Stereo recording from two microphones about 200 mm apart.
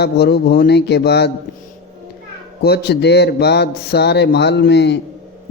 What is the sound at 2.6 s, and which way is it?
Speech, 55° left (ahead or behind).